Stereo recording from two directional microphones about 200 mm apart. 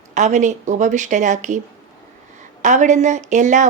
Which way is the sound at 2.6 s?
40° right (ahead or behind).